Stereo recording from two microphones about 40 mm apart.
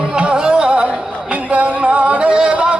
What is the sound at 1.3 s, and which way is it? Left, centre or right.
Yodeling, right.